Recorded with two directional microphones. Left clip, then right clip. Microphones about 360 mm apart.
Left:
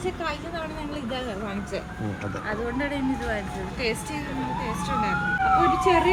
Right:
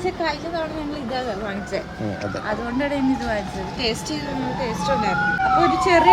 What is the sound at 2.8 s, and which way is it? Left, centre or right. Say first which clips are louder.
Speech: right 5 dB; right.